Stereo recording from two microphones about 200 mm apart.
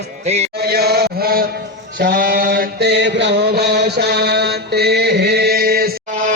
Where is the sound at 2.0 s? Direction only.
55° right (ahead or behind).